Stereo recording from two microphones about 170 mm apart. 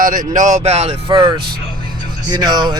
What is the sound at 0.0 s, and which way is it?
Speech, 50° right (ahead or behind).